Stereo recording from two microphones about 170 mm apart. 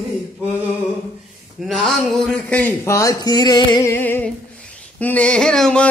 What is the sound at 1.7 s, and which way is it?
Music, centre (ahead or behind).